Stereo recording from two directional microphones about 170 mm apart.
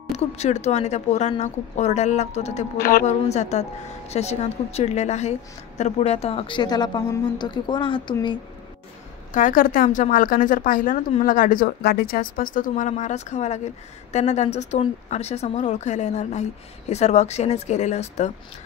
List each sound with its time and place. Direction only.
0.1 s speech: 40° left (ahead or behind)
2.8 s a woman's voice: 60° left (ahead or behind)
3.1 s a woman's voice: 40° left (ahead or behind)
9.3 s speech: 50° left (ahead or behind)